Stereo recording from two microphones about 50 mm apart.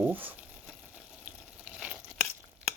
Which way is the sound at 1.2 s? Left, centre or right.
Right.